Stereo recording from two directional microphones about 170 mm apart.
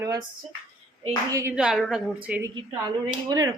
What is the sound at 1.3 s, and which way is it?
Speech, 20° right (ahead or behind).